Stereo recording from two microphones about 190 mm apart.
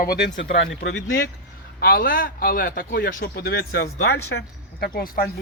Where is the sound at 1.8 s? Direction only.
50° left (ahead or behind).